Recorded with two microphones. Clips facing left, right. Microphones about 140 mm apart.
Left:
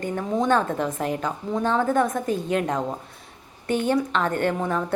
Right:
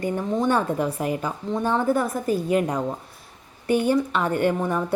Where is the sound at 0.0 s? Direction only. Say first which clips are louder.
Right 1 dB; 10° right (ahead or behind).